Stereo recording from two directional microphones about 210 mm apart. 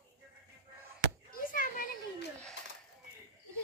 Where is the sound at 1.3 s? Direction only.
40° left (ahead or behind).